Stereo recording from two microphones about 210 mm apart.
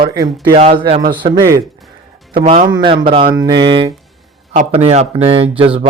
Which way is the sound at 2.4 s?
30° right (ahead or behind).